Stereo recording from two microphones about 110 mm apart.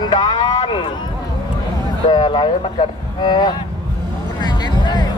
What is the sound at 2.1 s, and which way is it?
Speech, 45° left (ahead or behind).